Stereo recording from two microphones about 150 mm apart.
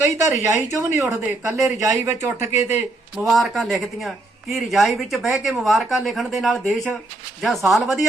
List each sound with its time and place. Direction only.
0.0 s speech: 15° right (ahead or behind)
3.2 s speech: centre (ahead or behind)